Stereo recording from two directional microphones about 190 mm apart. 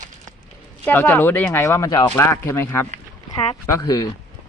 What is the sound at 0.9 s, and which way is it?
A woman's voice, 10° left (ahead or behind).